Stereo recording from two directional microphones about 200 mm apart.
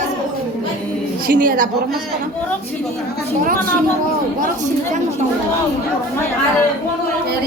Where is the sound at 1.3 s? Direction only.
45° right (ahead or behind).